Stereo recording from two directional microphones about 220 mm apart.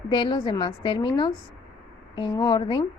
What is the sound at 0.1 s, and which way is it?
A woman's voice, 20° left (ahead or behind).